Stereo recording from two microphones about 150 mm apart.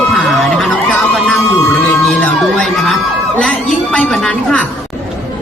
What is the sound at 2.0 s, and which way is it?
Music, 5° left (ahead or behind).